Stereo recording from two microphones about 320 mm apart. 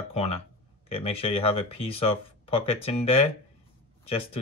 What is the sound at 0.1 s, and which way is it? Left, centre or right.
Speech, centre.